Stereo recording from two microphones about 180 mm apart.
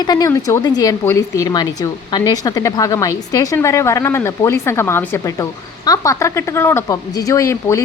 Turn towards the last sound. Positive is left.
turn(degrees=15)  # may be behind; listen again after turning